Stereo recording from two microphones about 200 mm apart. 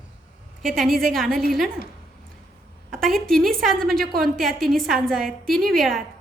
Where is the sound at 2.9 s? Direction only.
Centre (ahead or behind).